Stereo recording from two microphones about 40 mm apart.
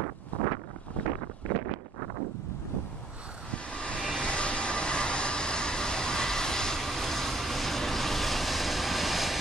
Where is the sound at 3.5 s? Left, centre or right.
Left.